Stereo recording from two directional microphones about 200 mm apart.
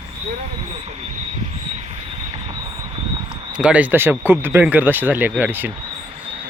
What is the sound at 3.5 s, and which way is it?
Speech, 5° right (ahead or behind).